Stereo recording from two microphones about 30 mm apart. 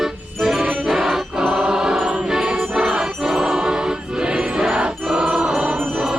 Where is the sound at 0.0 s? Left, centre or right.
Centre.